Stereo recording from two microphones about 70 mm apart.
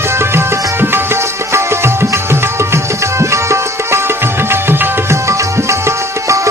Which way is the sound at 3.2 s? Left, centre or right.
Right.